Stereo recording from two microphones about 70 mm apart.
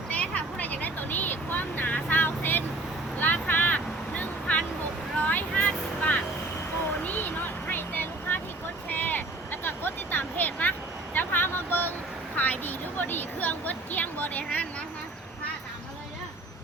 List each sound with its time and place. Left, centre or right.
0.1 s vehicle: left
7.7 s vehicle: left
8.9 s a sound: left